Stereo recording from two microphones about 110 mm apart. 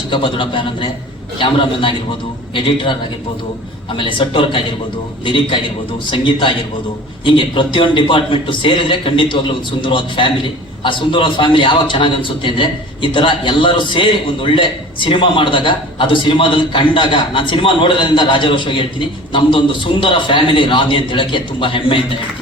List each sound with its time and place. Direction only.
0.1 s a man's voice: 50° left (ahead or behind)